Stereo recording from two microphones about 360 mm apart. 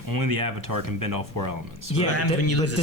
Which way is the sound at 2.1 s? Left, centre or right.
Left.